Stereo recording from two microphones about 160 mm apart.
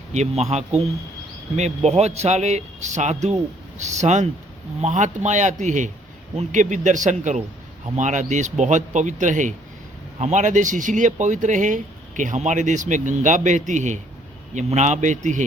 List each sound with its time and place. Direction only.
0.1 s speech: 45° right (ahead or behind)